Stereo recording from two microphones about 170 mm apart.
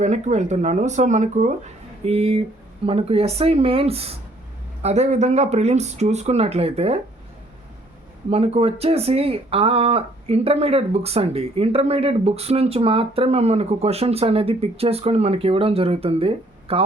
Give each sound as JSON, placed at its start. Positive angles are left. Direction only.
{"t": 0.0, "sound": "speech", "side_deg": -45}
{"t": 8.3, "sound": "speech", "side_deg": -35}